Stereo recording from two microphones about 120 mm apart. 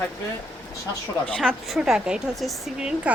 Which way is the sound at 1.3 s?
Centre (ahead or behind).